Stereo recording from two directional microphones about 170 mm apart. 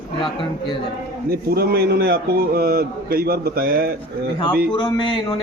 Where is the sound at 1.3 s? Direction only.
65° right (ahead or behind).